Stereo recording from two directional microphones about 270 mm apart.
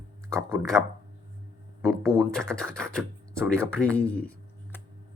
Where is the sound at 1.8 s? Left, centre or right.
Centre.